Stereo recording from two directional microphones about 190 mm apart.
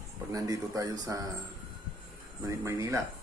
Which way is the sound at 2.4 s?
15° right (ahead or behind).